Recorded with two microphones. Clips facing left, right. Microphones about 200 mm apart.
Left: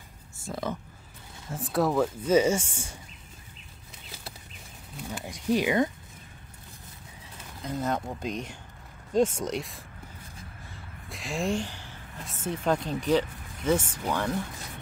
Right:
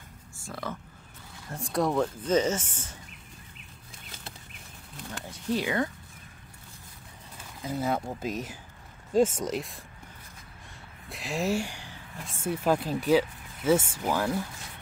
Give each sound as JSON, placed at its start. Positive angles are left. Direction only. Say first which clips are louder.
{"t": 0.5, "sound": "speech", "louder": "left 4 dB", "side_deg": 20}
{"t": 1.5, "sound": "speech", "louder": "left 1 dB", "side_deg": 5}
{"t": 5.2, "sound": "speech", "louder": "left 4 dB", "side_deg": 15}
{"t": 7.6, "sound": "speech", "louder": "right 1 dB", "side_deg": -5}
{"t": 10.7, "sound": "a sound", "louder": "right 2 dB", "side_deg": 0}
{"t": 12.4, "sound": "speech", "louder": "right 1 dB", "side_deg": -5}